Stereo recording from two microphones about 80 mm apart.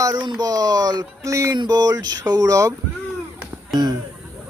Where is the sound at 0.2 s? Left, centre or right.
Right.